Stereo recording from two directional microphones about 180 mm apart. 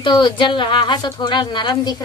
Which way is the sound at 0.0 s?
25° left (ahead or behind).